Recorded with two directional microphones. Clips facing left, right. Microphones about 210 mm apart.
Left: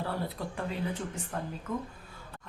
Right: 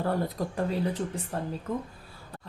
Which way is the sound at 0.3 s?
40° right (ahead or behind).